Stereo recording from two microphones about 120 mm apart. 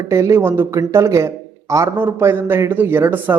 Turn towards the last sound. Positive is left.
turn(degrees=-15)  # may be behind; listen again after turning